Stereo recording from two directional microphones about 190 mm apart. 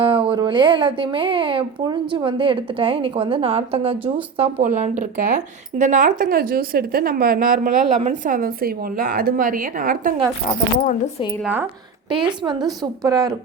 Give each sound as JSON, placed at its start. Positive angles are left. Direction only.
{"t": 0.0, "sound": "speech", "side_deg": -30}
{"t": 12.1, "sound": "speech", "side_deg": -25}